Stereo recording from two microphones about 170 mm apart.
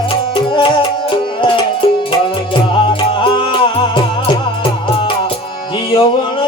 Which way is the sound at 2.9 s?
30° left (ahead or behind).